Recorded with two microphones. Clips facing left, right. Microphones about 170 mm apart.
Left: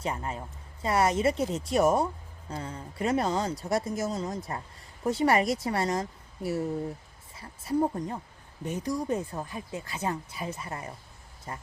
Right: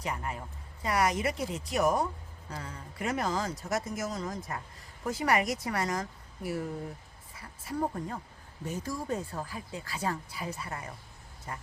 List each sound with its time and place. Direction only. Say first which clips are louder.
0.0 s speech: left 3 dB; 25° left (ahead or behind)